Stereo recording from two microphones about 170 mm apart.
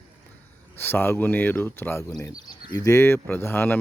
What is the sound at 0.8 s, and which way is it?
Speech, 10° left (ahead or behind).